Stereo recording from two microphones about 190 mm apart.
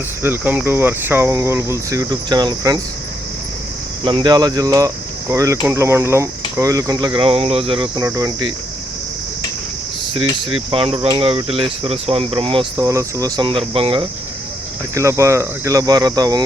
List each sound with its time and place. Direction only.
0.2 s speech: 10° right (ahead or behind)
4.0 s speech: 25° right (ahead or behind)
10.5 s speech: 30° right (ahead or behind)
14.9 s speech: 15° right (ahead or behind)